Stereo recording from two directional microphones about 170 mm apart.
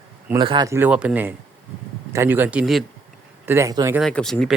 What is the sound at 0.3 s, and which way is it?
Speech, 25° right (ahead or behind).